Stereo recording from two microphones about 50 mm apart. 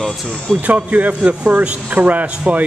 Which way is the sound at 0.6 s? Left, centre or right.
Right.